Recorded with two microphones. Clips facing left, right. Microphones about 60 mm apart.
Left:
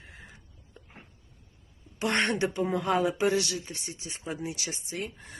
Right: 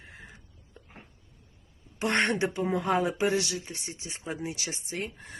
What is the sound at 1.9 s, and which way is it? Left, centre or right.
Speech, right.